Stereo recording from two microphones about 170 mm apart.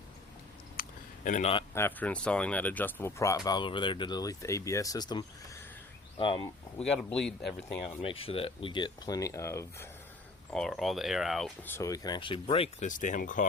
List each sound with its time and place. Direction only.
0.8 s a sound: 50° left (ahead or behind)
1.7 s speech: 10° left (ahead or behind); by 6.5 s 30° left (ahead or behind)
6.7 s speech: 5° left (ahead or behind)
7.8 s speech: 30° left (ahead or behind); by 9.9 s 15° left (ahead or behind)
10.5 s speech: 5° left (ahead or behind)
11.6 s speech: 15° left (ahead or behind); by 13.5 s 50° left (ahead or behind)